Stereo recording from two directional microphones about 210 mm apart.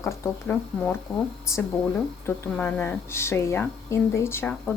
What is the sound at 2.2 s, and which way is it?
A woman's voice, 10° left (ahead or behind).